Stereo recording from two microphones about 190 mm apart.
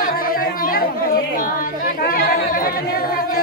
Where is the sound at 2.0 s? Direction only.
50° left (ahead or behind).